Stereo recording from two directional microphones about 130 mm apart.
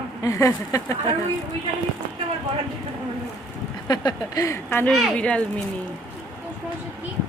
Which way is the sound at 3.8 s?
30° left (ahead or behind).